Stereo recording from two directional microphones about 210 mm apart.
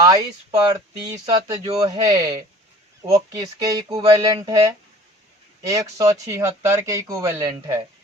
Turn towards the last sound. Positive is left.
turn(degrees=-15)  # may be behind; listen again after turning